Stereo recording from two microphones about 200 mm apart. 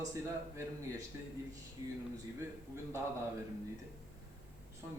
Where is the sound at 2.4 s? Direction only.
15° right (ahead or behind).